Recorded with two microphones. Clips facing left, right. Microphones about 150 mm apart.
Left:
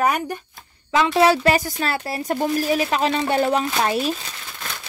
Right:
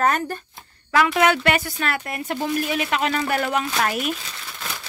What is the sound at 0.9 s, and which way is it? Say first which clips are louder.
Speech: left 2 dB; 25° left (ahead or behind).